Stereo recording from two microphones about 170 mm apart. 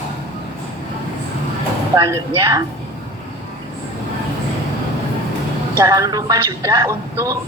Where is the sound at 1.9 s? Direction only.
20° right (ahead or behind).